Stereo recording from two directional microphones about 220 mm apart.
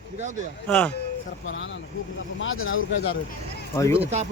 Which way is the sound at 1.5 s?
60° left (ahead or behind).